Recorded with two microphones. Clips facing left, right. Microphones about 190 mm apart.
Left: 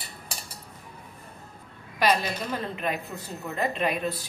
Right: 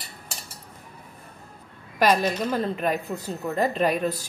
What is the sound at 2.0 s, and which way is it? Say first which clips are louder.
Cutlery: right 4 dB; 45° right (ahead or behind).